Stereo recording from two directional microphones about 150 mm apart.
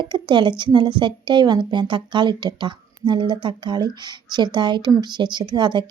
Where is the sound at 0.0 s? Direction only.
30° right (ahead or behind).